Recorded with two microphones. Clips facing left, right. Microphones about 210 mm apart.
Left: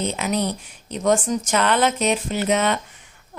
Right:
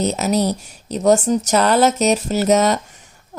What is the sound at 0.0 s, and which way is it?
A woman's voice, 40° right (ahead or behind).